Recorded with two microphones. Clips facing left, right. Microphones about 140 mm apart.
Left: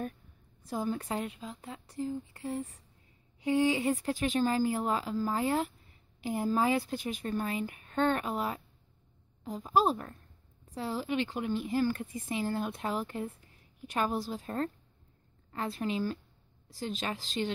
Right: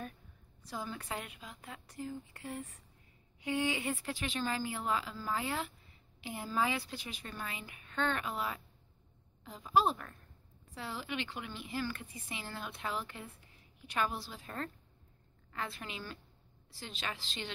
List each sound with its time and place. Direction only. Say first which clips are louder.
0.7 s speech: left 8 dB; 45° left (ahead or behind)